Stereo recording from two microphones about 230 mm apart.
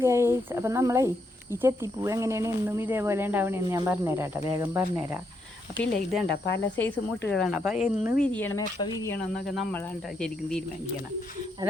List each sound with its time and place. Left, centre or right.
0.0 s speech: centre
6.2 s speech: left
6.7 s speech: centre
8.4 s speech: centre